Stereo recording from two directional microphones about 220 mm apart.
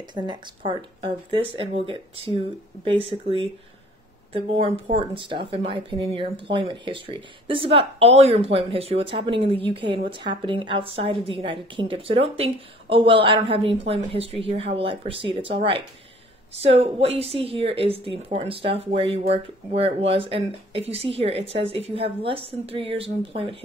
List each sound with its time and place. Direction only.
0.1 s speech: 20° right (ahead or behind)